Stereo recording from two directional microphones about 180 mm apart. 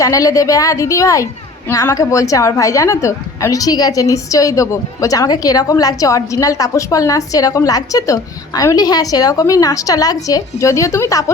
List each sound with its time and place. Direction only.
0.0 s a woman's voice: 20° left (ahead or behind)